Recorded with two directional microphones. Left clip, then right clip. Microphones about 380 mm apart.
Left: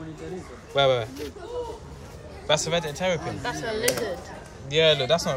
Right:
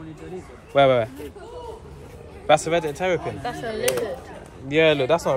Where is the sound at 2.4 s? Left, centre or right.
Centre.